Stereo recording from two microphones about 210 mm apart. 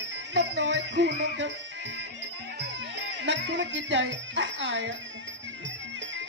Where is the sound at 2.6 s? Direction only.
60° right (ahead or behind).